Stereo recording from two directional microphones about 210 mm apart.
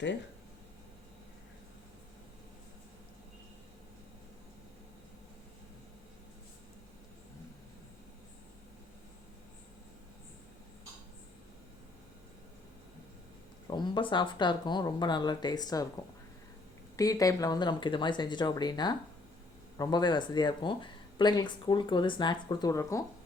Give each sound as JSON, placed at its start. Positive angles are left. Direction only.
{"t": 13.7, "sound": "speech", "side_deg": 20}
{"t": 17.0, "sound": "speech", "side_deg": 15}